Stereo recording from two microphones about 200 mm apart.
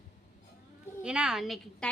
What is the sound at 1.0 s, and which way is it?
Speech, 5° right (ahead or behind).